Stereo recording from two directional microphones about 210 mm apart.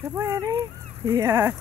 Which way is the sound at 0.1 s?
15° right (ahead or behind).